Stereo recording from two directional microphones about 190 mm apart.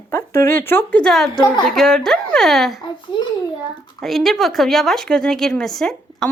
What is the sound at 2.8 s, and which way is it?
Speech, 25° left (ahead or behind).